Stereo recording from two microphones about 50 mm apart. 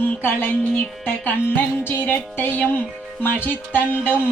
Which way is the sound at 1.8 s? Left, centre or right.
Left.